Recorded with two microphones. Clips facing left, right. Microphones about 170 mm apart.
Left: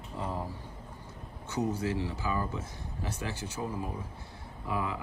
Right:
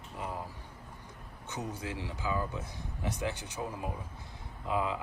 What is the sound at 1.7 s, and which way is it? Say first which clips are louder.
Speech: left 7 dB; 15° right (ahead or behind).